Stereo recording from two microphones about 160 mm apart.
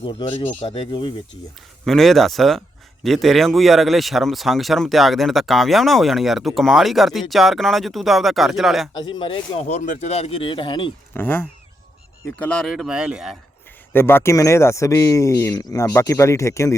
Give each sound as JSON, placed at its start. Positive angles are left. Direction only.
{"t": 0.0, "sound": "speech", "side_deg": 35}
{"t": 1.8, "sound": "speech", "side_deg": 0}
{"t": 8.9, "sound": "speech", "side_deg": 30}
{"t": 9.6, "sound": "speech", "side_deg": 50}
{"t": 11.1, "sound": "speech", "side_deg": 15}
{"t": 13.9, "sound": "speech", "side_deg": 15}